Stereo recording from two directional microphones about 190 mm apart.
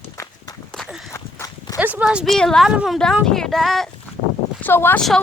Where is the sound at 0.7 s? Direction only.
Centre (ahead or behind).